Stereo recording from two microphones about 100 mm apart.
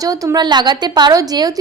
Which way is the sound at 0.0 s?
35° right (ahead or behind).